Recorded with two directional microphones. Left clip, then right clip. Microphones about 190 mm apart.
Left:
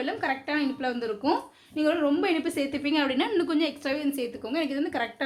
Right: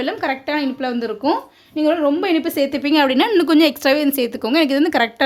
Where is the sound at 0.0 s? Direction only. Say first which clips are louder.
Right 8 dB; 50° right (ahead or behind).